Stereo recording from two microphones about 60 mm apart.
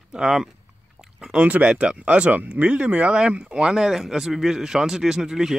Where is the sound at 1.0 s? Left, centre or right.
Centre.